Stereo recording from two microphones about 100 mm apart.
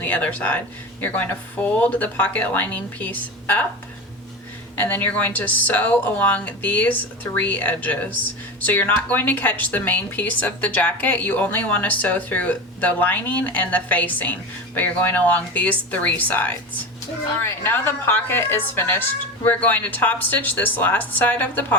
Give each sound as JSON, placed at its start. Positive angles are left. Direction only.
{"t": 0.0, "sound": "a woman's voice", "side_deg": 15}
{"t": 4.8, "sound": "a woman's voice", "side_deg": 15}
{"t": 17.6, "sound": "a woman's voice", "side_deg": 20}